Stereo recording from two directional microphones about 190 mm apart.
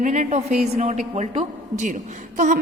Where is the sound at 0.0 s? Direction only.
40° right (ahead or behind).